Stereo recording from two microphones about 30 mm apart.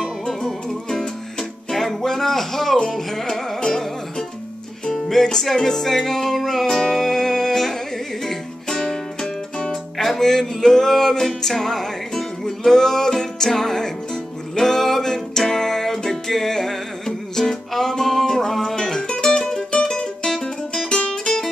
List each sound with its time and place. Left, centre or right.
0.3 s music: centre
2.0 s music: centre
4.9 s music: centre